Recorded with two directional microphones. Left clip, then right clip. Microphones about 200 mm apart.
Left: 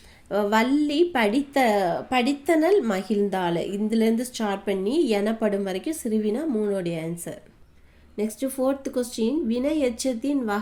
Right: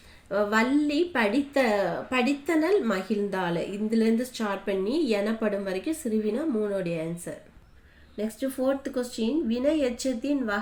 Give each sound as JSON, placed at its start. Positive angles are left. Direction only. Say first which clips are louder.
{"t": 0.3, "sound": "a woman's voice", "louder": "left 2 dB", "side_deg": 50}
{"t": 8.1, "sound": "a woman's voice", "louder": "left 3 dB", "side_deg": 50}